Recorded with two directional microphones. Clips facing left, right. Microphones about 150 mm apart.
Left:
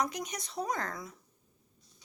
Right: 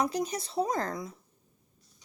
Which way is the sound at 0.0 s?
30° right (ahead or behind).